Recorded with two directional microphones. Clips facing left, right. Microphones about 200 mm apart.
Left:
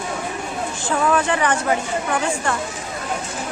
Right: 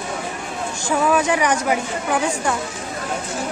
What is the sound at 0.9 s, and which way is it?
A woman's voice, 10° right (ahead or behind).